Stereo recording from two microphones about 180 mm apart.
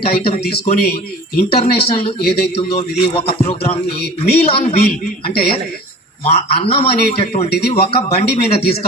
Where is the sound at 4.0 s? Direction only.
60° left (ahead or behind).